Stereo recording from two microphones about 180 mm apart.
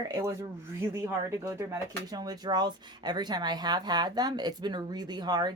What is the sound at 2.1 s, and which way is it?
Speech, 20° right (ahead or behind).